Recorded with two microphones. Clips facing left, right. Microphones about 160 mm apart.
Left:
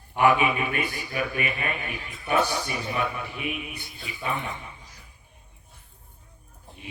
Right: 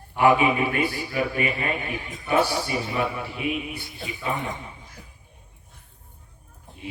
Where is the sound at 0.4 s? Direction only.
20° right (ahead or behind).